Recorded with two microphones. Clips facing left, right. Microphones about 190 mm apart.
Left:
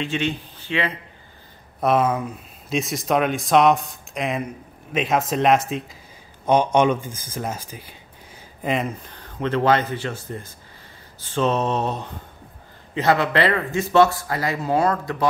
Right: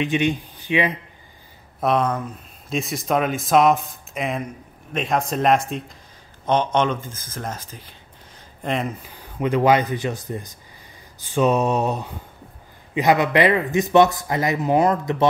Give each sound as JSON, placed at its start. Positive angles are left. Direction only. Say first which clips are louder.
{"t": 0.0, "sound": "speech", "louder": "right 4 dB", "side_deg": -15}
{"t": 1.8, "sound": "speech", "louder": "left 1 dB", "side_deg": 5}
{"t": 8.6, "sound": "speech", "louder": "left 1 dB", "side_deg": 0}